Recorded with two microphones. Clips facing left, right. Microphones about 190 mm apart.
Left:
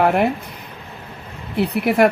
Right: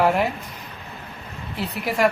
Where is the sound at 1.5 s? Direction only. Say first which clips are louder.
Left 8 dB; 60° left (ahead or behind).